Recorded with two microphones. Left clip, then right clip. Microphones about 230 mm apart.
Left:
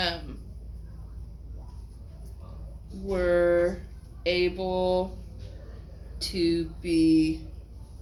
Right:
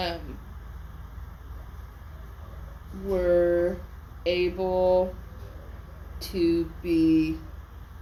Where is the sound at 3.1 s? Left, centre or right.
Centre.